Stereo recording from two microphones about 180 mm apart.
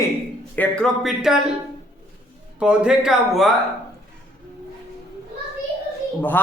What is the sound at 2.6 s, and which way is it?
Speech, 5° right (ahead or behind).